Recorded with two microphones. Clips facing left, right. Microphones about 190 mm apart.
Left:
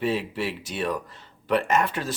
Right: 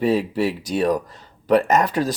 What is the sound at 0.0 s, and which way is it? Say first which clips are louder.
Speech: right 7 dB; 40° right (ahead or behind).